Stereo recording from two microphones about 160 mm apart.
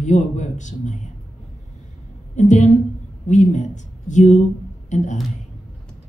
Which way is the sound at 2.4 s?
50° left (ahead or behind).